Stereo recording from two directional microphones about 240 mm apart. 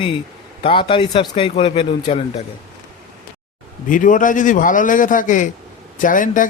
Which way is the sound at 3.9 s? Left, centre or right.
Left.